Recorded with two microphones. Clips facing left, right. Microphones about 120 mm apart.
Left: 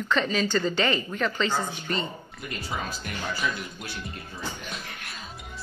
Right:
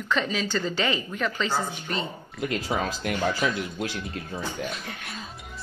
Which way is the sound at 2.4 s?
90° right.